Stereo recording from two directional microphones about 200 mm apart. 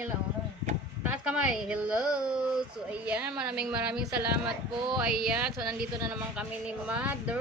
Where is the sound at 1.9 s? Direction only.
20° left (ahead or behind).